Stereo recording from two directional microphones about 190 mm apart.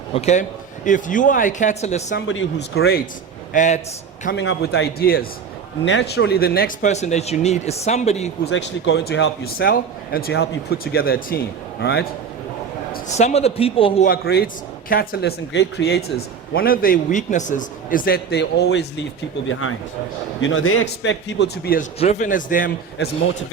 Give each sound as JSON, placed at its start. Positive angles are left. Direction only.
{"t": 0.1, "sound": "speech", "side_deg": 35}
{"t": 2.1, "sound": "speech", "side_deg": 85}
{"t": 3.5, "sound": "speech", "side_deg": 40}
{"t": 4.4, "sound": "a man's voice", "side_deg": 65}
{"t": 5.8, "sound": "a man's voice", "side_deg": 70}
{"t": 6.8, "sound": "speech", "side_deg": 35}
{"t": 8.4, "sound": "a man's voice", "side_deg": 70}
{"t": 13.1, "sound": "speech", "side_deg": 35}
{"t": 14.0, "sound": "speech", "side_deg": 55}
{"t": 19.5, "sound": "speech", "side_deg": 90}
{"t": 21.9, "sound": "speech", "side_deg": 35}
{"t": 23.0, "sound": "a man's voice", "side_deg": 60}